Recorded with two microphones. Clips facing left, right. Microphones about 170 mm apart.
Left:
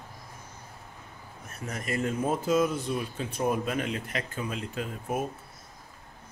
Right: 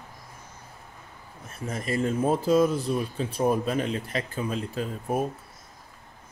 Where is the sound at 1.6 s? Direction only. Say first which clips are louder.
Right 3 dB; 30° right (ahead or behind).